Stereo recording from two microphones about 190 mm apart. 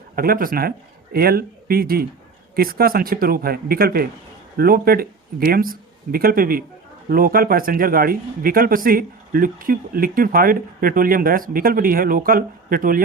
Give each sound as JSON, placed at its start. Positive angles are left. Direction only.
{"t": 0.2, "sound": "a man's voice", "side_deg": -50}